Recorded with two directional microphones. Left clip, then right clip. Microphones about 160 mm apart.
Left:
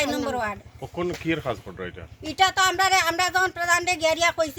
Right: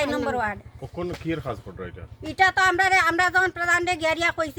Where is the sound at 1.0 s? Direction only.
35° left (ahead or behind).